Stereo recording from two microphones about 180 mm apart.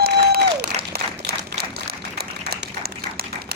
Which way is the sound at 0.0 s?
60° right (ahead or behind).